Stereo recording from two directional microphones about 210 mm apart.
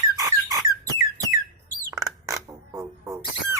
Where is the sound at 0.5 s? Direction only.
15° right (ahead or behind).